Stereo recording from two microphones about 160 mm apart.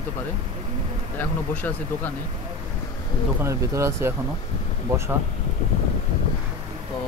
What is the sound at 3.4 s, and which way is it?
Speech, 20° right (ahead or behind).